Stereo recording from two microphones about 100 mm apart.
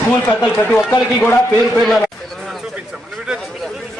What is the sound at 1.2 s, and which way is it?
Speech, 20° left (ahead or behind).